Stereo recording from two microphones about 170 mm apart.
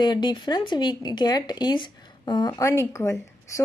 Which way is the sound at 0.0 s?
25° left (ahead or behind).